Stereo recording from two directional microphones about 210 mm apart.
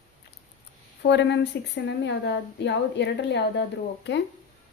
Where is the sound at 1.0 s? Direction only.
55° left (ahead or behind).